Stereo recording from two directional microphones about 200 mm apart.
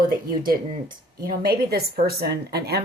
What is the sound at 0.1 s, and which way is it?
A woman's voice, 45° right (ahead or behind).